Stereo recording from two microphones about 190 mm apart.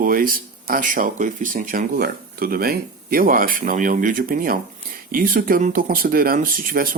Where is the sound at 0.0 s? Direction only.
45° right (ahead or behind).